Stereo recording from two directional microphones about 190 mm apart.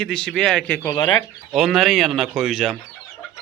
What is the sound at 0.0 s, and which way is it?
Speech, 5° left (ahead or behind).